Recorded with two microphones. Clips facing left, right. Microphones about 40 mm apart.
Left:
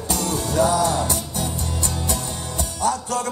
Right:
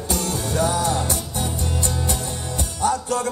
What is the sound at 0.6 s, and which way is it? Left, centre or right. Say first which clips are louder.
Music: left 2 dB; right.